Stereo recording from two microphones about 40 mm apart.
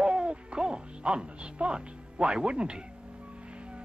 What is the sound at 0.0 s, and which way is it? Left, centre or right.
Music, right.